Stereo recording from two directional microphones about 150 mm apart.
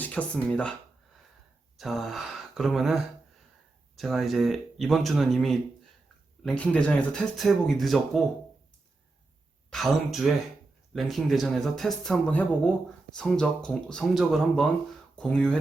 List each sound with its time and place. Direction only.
0.0 s speech: 10° left (ahead or behind)
1.8 s speech: centre (ahead or behind)
9.6 s speech: centre (ahead or behind)